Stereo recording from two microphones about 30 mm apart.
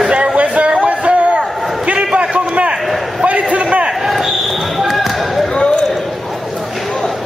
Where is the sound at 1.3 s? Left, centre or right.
Right.